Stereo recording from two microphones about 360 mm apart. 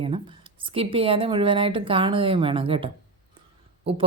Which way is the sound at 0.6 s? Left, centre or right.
Centre.